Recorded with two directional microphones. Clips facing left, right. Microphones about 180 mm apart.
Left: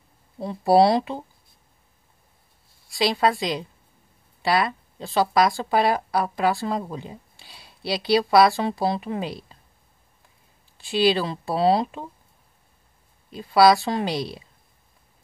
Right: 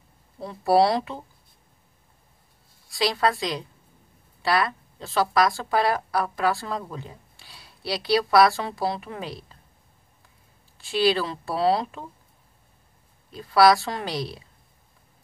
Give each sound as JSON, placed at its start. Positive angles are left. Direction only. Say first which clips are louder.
{"t": 0.4, "sound": "speech", "louder": "left 3 dB", "side_deg": 20}
{"t": 3.0, "sound": "speech", "louder": "left 2 dB", "side_deg": 20}
{"t": 10.8, "sound": "speech", "louder": "left 2 dB", "side_deg": 15}
{"t": 13.3, "sound": "speech", "louder": "left 1 dB", "side_deg": 20}